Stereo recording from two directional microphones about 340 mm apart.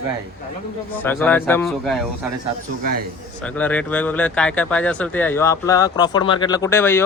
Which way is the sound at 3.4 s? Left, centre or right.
Centre.